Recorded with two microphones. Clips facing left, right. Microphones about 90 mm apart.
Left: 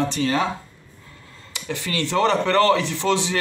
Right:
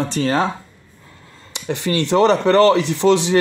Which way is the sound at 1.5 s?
25° right (ahead or behind).